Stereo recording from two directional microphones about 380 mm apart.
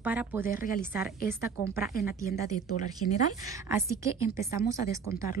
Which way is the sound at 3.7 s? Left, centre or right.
Centre.